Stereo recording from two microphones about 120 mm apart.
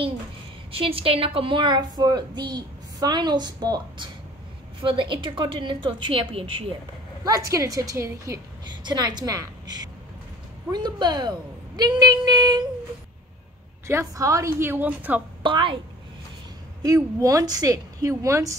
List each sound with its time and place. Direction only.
0.7 s a woman's voice: 50° right (ahead or behind)
7.2 s a woman's voice: 30° right (ahead or behind)
8.8 s a woman's voice: 35° right (ahead or behind)
13.8 s a woman's voice: 25° right (ahead or behind)
15.4 s a woman's voice: 45° right (ahead or behind)
16.8 s a woman's voice: 30° right (ahead or behind)